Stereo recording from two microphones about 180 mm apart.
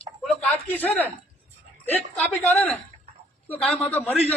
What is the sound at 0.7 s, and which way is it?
A man's voice, 10° left (ahead or behind).